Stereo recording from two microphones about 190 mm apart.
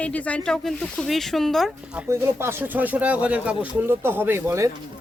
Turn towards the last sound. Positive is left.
turn(degrees=-15)  # may be behind; listen again after turning